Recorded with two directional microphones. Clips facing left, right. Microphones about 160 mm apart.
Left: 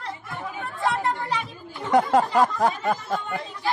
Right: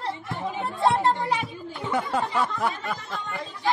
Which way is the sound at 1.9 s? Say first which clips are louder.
Left 7 dB; 40° left (ahead or behind).